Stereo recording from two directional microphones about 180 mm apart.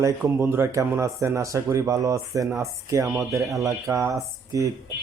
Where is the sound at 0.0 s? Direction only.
15° right (ahead or behind).